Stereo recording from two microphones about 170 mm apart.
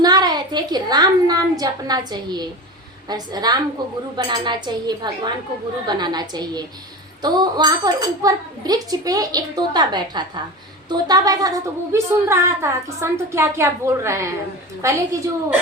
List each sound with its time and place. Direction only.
0.0 s a woman's voice: 25° right (ahead or behind)